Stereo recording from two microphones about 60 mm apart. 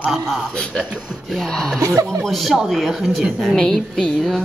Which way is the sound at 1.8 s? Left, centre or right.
Right.